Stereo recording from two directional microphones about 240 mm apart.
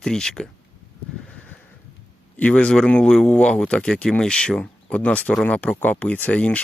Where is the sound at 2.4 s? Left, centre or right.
Centre.